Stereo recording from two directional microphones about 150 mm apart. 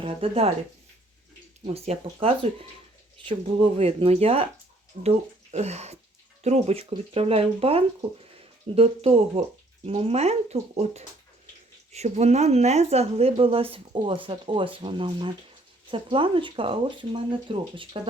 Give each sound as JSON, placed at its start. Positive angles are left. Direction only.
{"t": 0.0, "sound": "speech", "side_deg": -40}
{"t": 1.6, "sound": "speech", "side_deg": -45}